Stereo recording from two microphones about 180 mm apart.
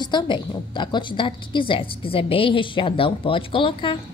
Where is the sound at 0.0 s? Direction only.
25° left (ahead or behind).